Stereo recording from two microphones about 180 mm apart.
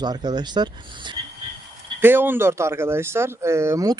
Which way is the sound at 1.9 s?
10° right (ahead or behind).